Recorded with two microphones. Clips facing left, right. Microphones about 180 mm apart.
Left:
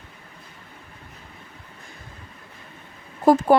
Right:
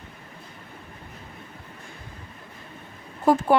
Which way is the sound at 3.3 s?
35° left (ahead or behind).